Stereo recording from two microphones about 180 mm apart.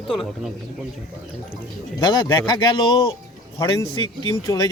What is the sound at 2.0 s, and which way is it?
Speech, 25° left (ahead or behind).